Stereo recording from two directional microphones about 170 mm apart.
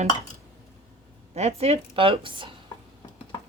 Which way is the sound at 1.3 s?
40° right (ahead or behind).